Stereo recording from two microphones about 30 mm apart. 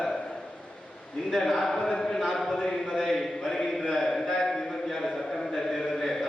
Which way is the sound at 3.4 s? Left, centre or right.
Centre.